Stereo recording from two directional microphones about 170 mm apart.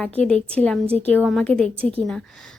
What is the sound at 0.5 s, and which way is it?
A woman's voice, 5° left (ahead or behind).